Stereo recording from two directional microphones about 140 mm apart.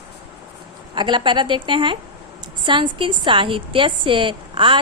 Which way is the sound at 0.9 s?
35° right (ahead or behind).